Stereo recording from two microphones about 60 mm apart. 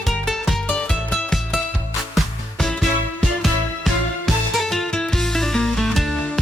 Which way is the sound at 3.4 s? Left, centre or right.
Centre.